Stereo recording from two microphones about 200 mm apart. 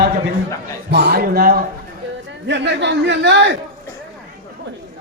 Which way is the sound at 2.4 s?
60° right (ahead or behind).